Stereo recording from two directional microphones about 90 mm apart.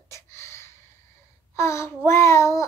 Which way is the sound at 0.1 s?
30° left (ahead or behind).